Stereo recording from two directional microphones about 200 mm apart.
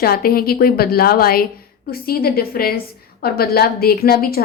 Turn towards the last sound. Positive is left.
turn(degrees=50)  # may be behind; listen again after turning